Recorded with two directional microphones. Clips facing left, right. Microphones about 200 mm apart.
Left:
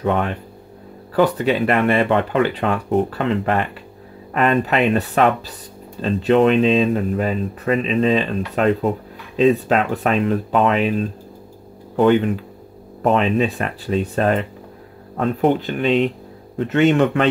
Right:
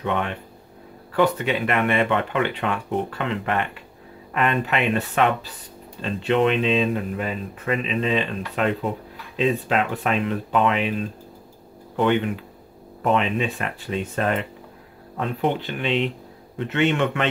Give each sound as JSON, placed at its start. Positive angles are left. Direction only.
{"t": 0.0, "sound": "speech", "side_deg": 40}
{"t": 13.0, "sound": "speech", "side_deg": 40}